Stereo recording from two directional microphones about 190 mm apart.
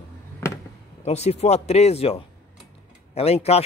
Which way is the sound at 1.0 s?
35° left (ahead or behind).